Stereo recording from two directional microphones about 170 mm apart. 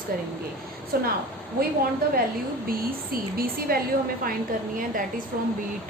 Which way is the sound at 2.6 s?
60° right (ahead or behind).